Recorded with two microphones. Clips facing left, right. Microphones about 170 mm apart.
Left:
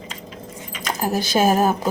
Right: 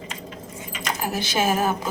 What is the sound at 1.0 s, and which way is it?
Speech, 40° left (ahead or behind).